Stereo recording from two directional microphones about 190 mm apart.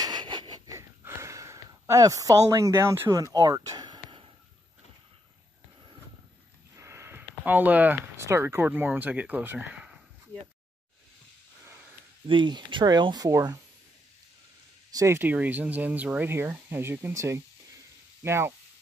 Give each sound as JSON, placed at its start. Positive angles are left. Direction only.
{"t": 0.0, "sound": "wheeze", "side_deg": -20}
{"t": 3.3, "sound": "a sound", "side_deg": -20}
{"t": 6.8, "sound": "speech", "side_deg": -15}
{"t": 12.3, "sound": "speech", "side_deg": -25}
{"t": 14.9, "sound": "speech", "side_deg": -15}